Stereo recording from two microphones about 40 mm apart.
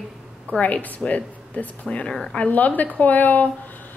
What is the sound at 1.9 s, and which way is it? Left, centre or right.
Speech, left.